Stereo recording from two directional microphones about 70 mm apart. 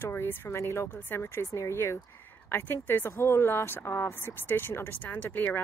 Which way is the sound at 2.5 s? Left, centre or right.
Left.